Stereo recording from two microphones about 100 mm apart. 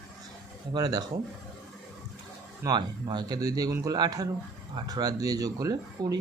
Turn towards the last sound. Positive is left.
turn(degrees=-40)  # may be behind; listen again after turning